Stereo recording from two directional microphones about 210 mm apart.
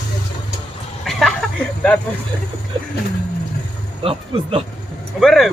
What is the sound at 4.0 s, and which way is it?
Speech, 25° right (ahead or behind).